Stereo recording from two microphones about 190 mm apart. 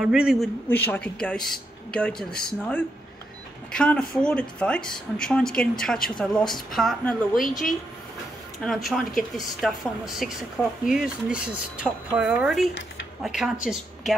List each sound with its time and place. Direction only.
0.0 s speech: 5° right (ahead or behind)
0.7 s speech: 10° left (ahead or behind)
3.7 s speech: 5° left (ahead or behind)
7.4 s a woman's voice: 45° left (ahead or behind)
8.6 s speech: centre (ahead or behind)